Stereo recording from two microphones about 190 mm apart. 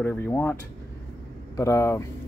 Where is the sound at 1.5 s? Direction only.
15° left (ahead or behind).